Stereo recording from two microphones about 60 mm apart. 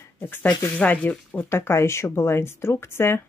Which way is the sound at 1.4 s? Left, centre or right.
Left.